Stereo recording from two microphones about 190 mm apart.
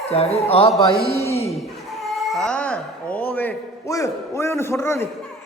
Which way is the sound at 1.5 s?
Centre (ahead or behind).